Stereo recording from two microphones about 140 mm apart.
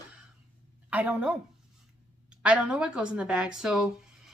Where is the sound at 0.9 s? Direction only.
10° right (ahead or behind).